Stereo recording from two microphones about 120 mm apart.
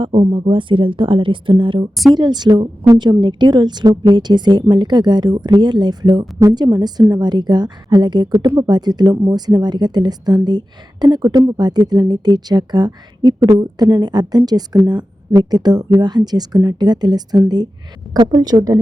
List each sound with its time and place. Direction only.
0.0 s speech: 50° right (ahead or behind); by 18.8 s 30° right (ahead or behind)